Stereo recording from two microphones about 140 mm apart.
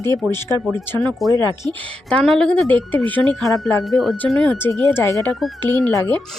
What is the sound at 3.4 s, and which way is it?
Speech, centre (ahead or behind).